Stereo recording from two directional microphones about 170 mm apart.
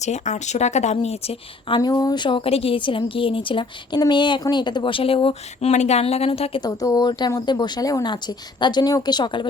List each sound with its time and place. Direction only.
0.0 s speech: 45° left (ahead or behind)
1.7 s a woman's voice: 25° left (ahead or behind)